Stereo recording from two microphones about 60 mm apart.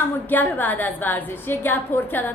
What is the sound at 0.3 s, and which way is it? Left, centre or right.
A woman's voice, left.